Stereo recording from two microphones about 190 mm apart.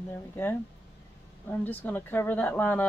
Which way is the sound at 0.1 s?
10° left (ahead or behind).